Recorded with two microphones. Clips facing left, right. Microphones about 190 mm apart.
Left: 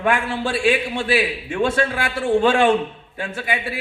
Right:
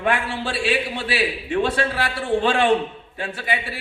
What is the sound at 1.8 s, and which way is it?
Speech, 35° right (ahead or behind).